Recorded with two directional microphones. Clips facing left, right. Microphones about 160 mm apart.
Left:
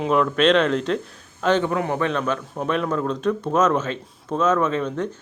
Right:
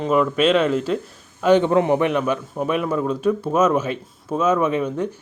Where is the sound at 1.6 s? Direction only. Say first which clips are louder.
Right 5 dB; 20° right (ahead or behind).